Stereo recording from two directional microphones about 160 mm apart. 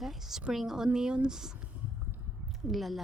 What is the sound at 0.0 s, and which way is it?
Speech, centre (ahead or behind).